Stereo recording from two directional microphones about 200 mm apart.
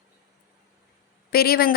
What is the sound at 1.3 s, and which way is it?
Speech, 50° left (ahead or behind).